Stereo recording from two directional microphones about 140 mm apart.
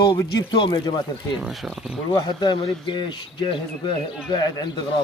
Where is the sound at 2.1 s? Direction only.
35° left (ahead or behind).